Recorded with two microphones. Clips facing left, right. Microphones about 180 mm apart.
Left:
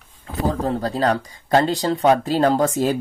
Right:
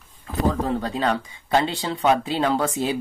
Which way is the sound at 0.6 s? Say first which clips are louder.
Left 3 dB; 35° left (ahead or behind).